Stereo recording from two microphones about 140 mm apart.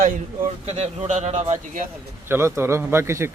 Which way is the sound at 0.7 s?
50° right (ahead or behind).